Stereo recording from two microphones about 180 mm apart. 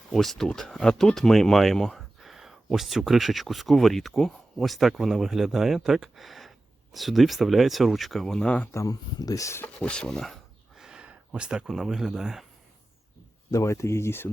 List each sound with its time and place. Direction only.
0.1 s speech: centre (ahead or behind)
9.7 s speech: 5° left (ahead or behind)
13.5 s speech: 15° left (ahead or behind)